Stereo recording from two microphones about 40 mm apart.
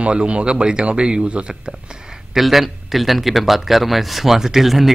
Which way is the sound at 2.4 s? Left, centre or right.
Centre.